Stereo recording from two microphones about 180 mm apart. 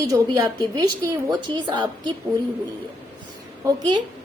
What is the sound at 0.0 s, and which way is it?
A woman's voice, 20° right (ahead or behind).